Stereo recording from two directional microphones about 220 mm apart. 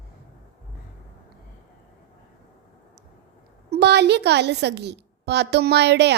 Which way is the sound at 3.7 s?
50° right (ahead or behind).